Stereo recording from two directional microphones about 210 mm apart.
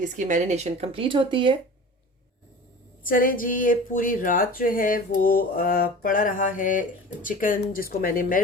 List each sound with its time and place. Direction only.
0.0 s speech: 35° right (ahead or behind)
3.0 s speech: 40° left (ahead or behind)